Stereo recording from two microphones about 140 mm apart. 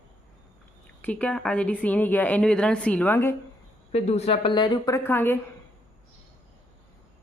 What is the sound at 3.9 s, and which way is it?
A woman's voice, 50° left (ahead or behind).